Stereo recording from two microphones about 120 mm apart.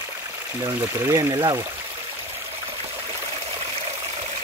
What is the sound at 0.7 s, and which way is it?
Speech, 30° right (ahead or behind).